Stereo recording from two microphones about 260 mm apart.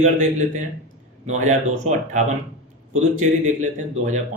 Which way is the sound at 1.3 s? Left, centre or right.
Right.